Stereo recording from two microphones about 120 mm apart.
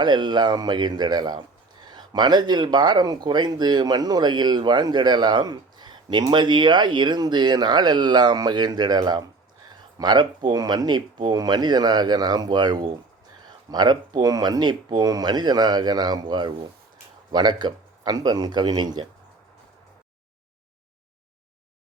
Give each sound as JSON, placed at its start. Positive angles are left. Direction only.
{"t": 0.0, "sound": "speech", "side_deg": -40}